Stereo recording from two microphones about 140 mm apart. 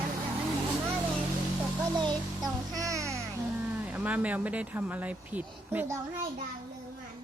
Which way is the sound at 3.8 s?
10° right (ahead or behind).